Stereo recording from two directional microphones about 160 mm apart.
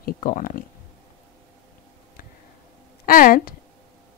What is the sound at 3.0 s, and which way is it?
Speech, 60° left (ahead or behind).